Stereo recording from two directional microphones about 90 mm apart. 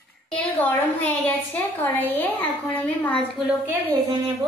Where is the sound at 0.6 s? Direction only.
20° left (ahead or behind).